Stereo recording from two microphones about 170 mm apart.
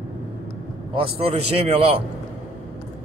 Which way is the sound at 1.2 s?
35° right (ahead or behind).